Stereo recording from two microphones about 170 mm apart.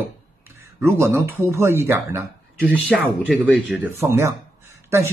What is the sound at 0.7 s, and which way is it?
Speech, 15° right (ahead or behind).